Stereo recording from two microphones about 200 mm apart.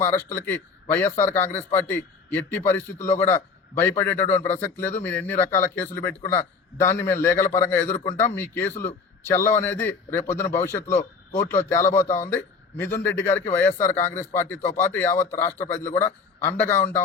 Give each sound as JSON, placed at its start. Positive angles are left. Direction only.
{"t": 0.1, "sound": "speech", "side_deg": 15}